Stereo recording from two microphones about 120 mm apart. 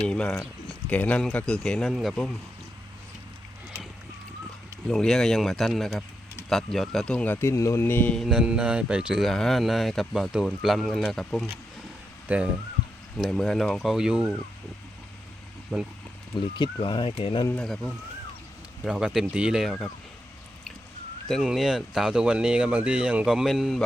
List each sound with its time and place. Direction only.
0.0 s speech: 10° left (ahead or behind)
4.9 s speech: 5° left (ahead or behind)
7.4 s speech: 25° left (ahead or behind)
8.1 s speech: centre (ahead or behind)
12.3 s speech: 15° right (ahead or behind)
13.1 s speech: centre (ahead or behind)
15.7 s speech: 5° right (ahead or behind)
16.6 s speech: 40° left (ahead or behind)
17.5 s speech: 5° left (ahead or behind)
21.2 s speech: centre (ahead or behind)